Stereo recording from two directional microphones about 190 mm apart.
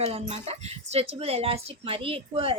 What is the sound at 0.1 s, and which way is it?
A woman's voice, 35° right (ahead or behind).